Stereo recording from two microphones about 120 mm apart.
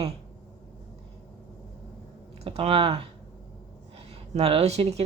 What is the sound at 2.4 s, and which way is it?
Speech, 55° right (ahead or behind).